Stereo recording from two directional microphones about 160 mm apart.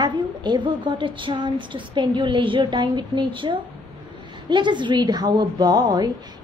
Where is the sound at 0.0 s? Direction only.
25° right (ahead or behind).